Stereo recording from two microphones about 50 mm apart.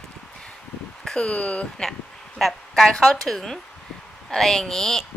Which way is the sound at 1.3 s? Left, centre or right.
Left.